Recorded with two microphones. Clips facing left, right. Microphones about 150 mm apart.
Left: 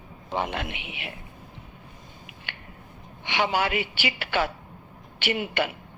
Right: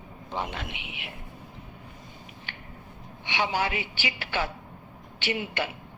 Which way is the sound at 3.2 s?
75° left (ahead or behind).